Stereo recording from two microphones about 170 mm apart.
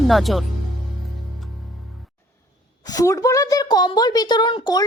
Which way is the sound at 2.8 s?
20° left (ahead or behind).